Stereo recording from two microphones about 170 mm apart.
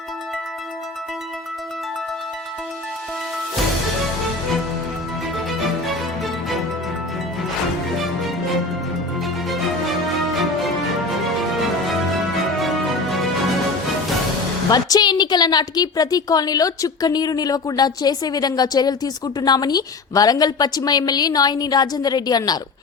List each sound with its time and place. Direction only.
12.1 s music: centre (ahead or behind)
14.7 s a woman's voice: 20° left (ahead or behind)